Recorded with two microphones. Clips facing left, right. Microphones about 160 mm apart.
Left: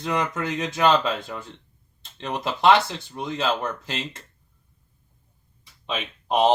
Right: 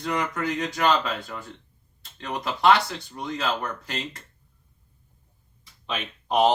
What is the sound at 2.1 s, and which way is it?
Speech, 25° left (ahead or behind).